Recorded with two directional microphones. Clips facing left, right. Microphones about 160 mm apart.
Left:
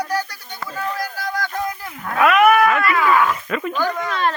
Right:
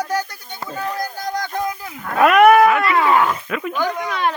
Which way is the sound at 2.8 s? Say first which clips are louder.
Right 1 dB; 25° right (ahead or behind).